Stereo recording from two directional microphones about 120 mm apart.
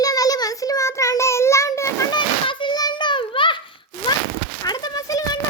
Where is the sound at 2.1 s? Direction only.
40° left (ahead or behind).